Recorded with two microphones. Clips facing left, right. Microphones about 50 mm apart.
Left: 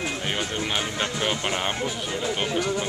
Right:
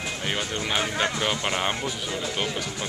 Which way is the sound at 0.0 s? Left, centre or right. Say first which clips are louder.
Left 1 dB; centre.